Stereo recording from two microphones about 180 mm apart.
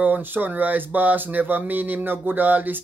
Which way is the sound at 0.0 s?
10° right (ahead or behind).